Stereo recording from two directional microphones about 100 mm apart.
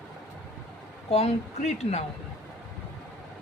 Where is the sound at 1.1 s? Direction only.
90° left.